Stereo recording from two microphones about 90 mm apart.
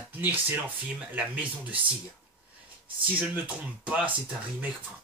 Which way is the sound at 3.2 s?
15° right (ahead or behind).